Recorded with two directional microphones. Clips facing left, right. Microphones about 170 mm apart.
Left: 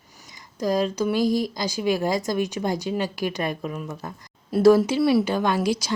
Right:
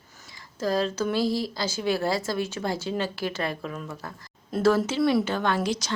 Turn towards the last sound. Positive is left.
turn(degrees=10)  # may be behind; listen again after turning